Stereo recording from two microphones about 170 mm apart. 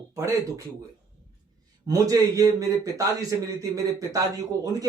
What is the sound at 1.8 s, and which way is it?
A man's voice, 20° right (ahead or behind).